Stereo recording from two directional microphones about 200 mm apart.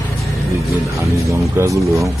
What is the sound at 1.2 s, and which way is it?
Music, 15° right (ahead or behind).